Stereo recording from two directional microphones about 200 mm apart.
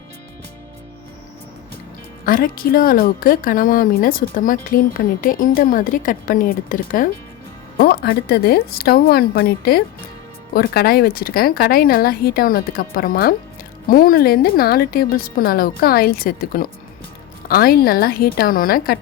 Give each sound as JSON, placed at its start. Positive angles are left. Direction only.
{"t": 2.2, "sound": "speech", "side_deg": 45}